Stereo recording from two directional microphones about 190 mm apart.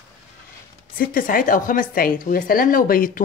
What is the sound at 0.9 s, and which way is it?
A woman's voice, 45° left (ahead or behind).